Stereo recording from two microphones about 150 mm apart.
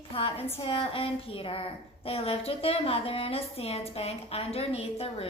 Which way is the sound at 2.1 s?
40° left (ahead or behind).